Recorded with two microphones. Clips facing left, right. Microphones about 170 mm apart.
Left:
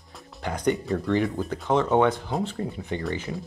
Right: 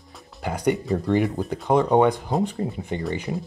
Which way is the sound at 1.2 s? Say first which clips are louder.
Right 2 dB; centre (ahead or behind).